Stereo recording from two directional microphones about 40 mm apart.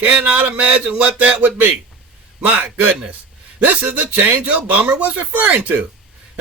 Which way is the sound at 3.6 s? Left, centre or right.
Right.